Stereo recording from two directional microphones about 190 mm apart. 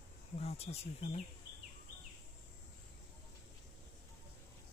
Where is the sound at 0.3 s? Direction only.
35° left (ahead or behind).